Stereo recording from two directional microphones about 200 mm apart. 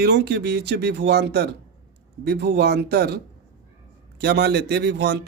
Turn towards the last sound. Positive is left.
turn(degrees=-60)  # may be behind; listen again after turning